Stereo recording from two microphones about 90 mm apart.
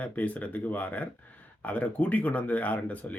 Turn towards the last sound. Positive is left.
turn(degrees=15)  # may be behind; listen again after turning